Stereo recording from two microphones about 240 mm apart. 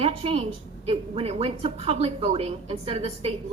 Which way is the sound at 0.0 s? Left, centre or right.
Right.